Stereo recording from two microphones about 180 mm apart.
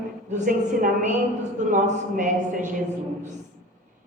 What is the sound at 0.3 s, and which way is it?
A woman's voice, 45° right (ahead or behind).